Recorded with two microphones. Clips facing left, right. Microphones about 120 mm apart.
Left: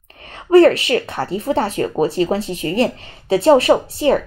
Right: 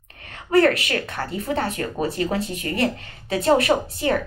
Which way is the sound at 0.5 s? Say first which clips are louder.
Left 7 dB; 25° left (ahead or behind).